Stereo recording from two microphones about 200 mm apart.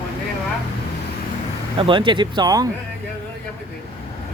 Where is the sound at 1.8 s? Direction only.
25° right (ahead or behind).